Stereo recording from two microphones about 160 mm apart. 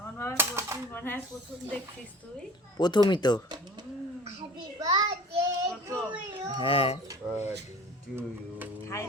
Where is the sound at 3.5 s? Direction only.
25° right (ahead or behind).